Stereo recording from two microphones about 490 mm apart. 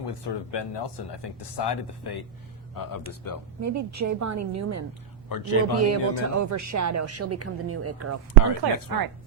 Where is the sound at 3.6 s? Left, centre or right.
Right.